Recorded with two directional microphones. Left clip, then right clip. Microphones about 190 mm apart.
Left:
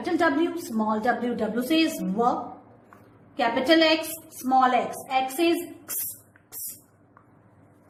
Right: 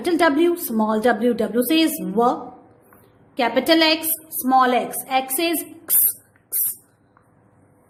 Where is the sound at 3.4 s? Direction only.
60° right (ahead or behind).